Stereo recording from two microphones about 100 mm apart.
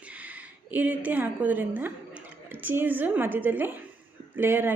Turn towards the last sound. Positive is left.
turn(degrees=-20)  # may be behind; listen again after turning